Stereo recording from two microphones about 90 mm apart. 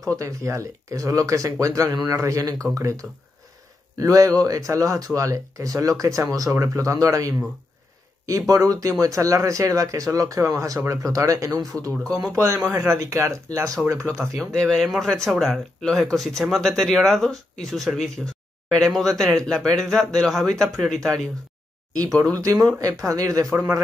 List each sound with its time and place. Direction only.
0.1 s speech: 35° right (ahead or behind)
14.5 s speech: 5° left (ahead or behind)
15.8 s speech: 5° left (ahead or behind)
21.9 s speech: 45° right (ahead or behind)